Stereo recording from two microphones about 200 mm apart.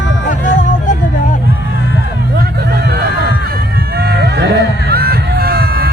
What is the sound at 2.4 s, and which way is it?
Music, 50° right (ahead or behind).